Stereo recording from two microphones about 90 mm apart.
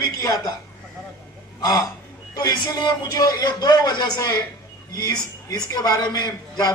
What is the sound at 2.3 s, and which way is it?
A man's voice, 45° left (ahead or behind).